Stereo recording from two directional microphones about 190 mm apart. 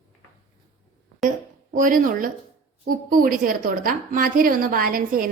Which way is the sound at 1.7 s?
45° right (ahead or behind).